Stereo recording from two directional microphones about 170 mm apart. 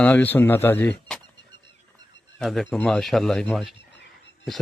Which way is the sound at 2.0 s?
90° left.